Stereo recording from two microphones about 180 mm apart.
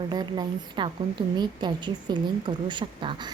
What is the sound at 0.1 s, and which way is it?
Speech, 25° right (ahead or behind).